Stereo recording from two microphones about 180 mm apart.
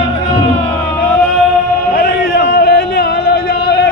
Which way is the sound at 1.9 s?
60° left (ahead or behind).